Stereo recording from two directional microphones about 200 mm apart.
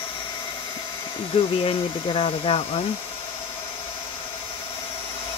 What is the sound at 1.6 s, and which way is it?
Speech, 25° left (ahead or behind).